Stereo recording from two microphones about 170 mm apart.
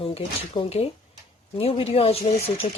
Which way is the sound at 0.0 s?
30° left (ahead or behind).